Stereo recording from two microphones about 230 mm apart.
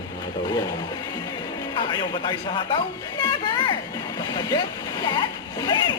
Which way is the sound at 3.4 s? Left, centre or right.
Centre.